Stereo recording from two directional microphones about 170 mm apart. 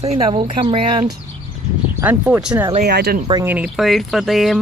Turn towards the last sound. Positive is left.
turn(degrees=0)  # may be behind; listen again after turning